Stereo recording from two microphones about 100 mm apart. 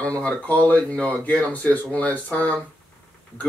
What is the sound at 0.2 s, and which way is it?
Speech, 15° left (ahead or behind).